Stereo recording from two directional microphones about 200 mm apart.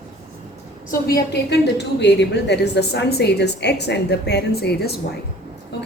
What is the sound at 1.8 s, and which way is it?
A woman's voice, 60° left (ahead or behind).